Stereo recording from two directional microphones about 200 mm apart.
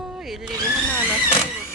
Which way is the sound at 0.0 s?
Centre (ahead or behind).